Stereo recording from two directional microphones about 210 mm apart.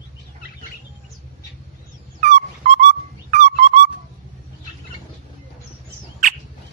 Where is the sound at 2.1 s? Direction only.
35° right (ahead or behind).